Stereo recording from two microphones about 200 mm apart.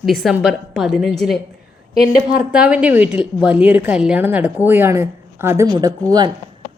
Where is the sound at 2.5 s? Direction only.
5° right (ahead or behind).